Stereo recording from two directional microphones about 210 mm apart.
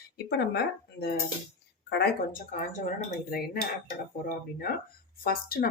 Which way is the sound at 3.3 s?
45° left (ahead or behind).